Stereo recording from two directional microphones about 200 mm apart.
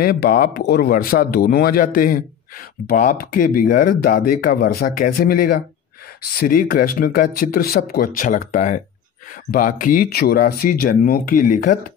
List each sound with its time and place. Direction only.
0.0 s speech: 50° left (ahead or behind)